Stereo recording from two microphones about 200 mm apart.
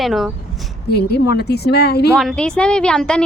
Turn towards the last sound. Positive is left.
turn(degrees=5)  # may be behind; listen again after turning